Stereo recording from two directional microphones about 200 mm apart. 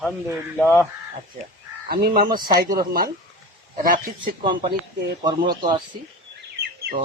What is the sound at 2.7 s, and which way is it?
Speech, 50° right (ahead or behind).